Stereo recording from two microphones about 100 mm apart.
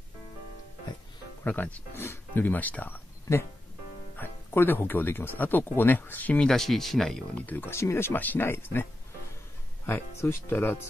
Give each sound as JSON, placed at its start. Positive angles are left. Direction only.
{"t": 1.4, "sound": "speech", "side_deg": 15}
{"t": 6.5, "sound": "speech", "side_deg": 5}
{"t": 9.8, "sound": "speech", "side_deg": 25}